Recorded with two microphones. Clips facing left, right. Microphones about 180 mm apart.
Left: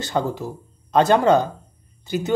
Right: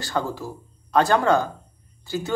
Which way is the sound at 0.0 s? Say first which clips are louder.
Left 3 dB; 20° left (ahead or behind).